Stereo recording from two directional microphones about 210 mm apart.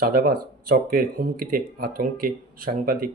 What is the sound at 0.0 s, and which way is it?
Speech, 45° right (ahead or behind).